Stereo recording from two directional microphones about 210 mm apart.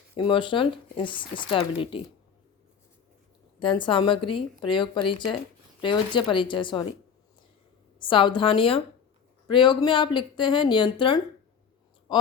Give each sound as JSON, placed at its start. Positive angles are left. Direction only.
{"t": 0.2, "sound": "speech", "side_deg": 25}
{"t": 3.6, "sound": "speech", "side_deg": 25}
{"t": 8.0, "sound": "speech", "side_deg": 25}